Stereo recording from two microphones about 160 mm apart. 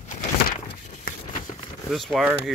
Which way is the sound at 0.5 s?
50° left (ahead or behind).